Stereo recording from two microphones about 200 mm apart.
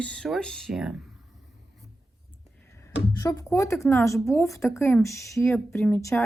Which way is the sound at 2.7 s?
15° left (ahead or behind).